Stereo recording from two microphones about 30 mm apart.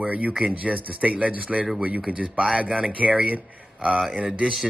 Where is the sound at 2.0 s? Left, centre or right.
Right.